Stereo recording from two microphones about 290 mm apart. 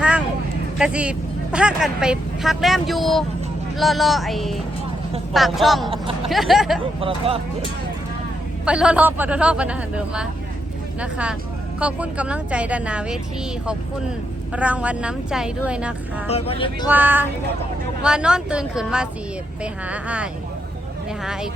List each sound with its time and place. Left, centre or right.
0.8 s a woman's voice: centre
7.3 s speech: centre
8.6 s a woman's voice: centre
14.5 s a woman's voice: centre
16.3 s speech: centre
16.9 s a woman's voice: centre